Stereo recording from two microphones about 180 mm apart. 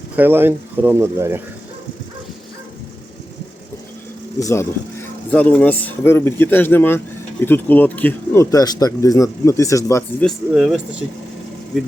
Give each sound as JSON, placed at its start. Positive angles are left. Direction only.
{"t": 0.2, "sound": "speech", "side_deg": -10}
{"t": 4.4, "sound": "speech", "side_deg": 15}
{"t": 10.2, "sound": "speech", "side_deg": 0}